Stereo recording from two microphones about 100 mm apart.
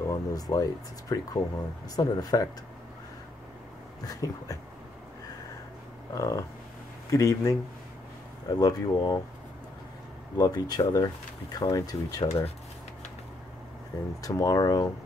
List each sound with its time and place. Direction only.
0.0 s speech: 35° left (ahead or behind)
4.0 s speech: 35° left (ahead or behind)
6.1 s speech: 35° left (ahead or behind)
10.3 s speech: 40° left (ahead or behind)
14.2 s speech: 35° left (ahead or behind)